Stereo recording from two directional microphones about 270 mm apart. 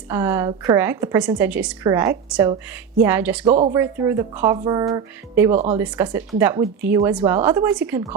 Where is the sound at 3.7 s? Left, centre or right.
Centre.